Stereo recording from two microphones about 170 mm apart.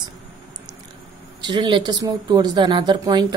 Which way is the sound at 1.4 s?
25° right (ahead or behind).